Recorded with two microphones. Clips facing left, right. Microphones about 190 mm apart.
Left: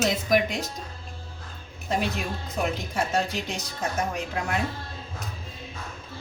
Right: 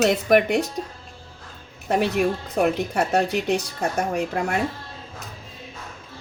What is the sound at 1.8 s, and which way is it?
Speech, 65° right (ahead or behind).